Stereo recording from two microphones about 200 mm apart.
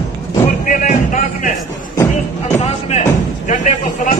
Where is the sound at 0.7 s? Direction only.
40° left (ahead or behind).